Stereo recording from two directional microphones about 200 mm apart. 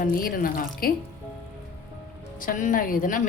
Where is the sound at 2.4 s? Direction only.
40° left (ahead or behind).